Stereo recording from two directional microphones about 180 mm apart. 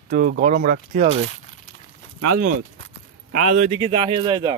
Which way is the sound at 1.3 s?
40° left (ahead or behind).